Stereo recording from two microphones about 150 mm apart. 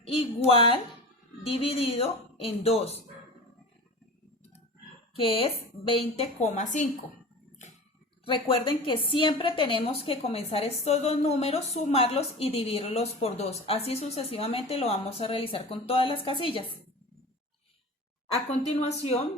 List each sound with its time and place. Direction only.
0.0 s a woman's voice: 35° left (ahead or behind)
5.1 s speech: 40° left (ahead or behind); by 6.8 s 55° left (ahead or behind)
8.3 s a woman's voice: 35° left (ahead or behind)
18.4 s speech: 45° left (ahead or behind)